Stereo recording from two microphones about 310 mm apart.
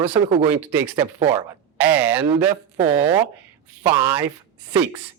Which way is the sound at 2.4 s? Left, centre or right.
Centre.